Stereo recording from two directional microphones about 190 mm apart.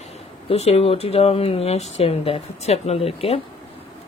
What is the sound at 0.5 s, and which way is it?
A woman's voice, 30° left (ahead or behind).